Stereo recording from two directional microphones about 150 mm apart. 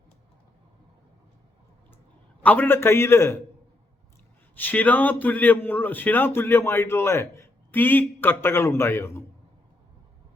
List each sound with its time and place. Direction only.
2.4 s a man's voice: 10° left (ahead or behind)
4.5 s a man's voice: 10° left (ahead or behind)